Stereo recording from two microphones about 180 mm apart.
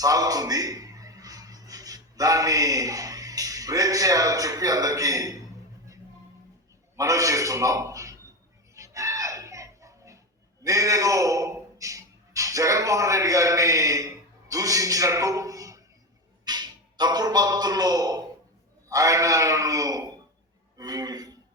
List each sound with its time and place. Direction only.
0.0 s a man's voice: 20° right (ahead or behind)
6.9 s a man's voice: 20° right (ahead or behind)
8.7 s a sound: 15° right (ahead or behind)
10.6 s a man's voice: 20° right (ahead or behind)